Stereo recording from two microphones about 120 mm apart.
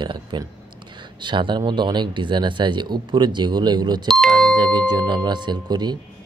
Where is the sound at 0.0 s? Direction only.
40° right (ahead or behind).